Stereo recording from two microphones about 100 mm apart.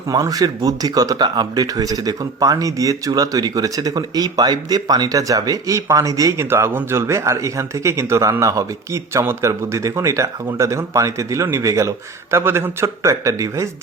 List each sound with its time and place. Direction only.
0.1 s speech: 35° right (ahead or behind)
6.4 s a man's voice: 25° right (ahead or behind)